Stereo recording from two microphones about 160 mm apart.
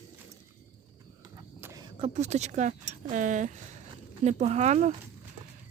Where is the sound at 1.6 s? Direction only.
20° right (ahead or behind).